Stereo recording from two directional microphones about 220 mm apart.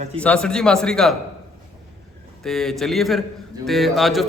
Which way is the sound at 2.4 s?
Centre (ahead or behind).